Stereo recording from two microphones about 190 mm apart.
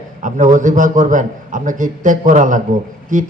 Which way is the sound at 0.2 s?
40° right (ahead or behind).